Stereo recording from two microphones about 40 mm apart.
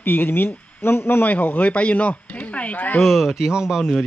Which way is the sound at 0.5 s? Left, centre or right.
Left.